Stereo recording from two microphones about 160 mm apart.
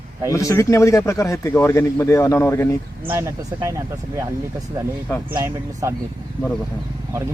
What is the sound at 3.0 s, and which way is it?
Speech, 15° right (ahead or behind).